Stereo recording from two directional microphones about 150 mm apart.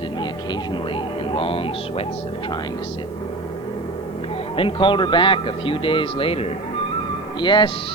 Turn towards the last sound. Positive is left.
turn(degrees=30)  # may be behind; listen again after turning